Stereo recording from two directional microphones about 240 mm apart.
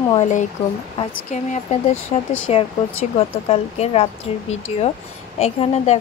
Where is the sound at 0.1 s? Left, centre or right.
Left.